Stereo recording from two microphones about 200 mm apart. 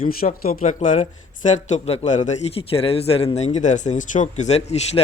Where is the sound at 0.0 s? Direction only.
45° left (ahead or behind).